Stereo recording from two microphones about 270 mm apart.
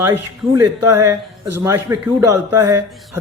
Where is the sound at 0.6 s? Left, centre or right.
Right.